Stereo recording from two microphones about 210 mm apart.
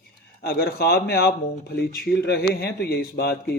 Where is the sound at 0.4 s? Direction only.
45° left (ahead or behind).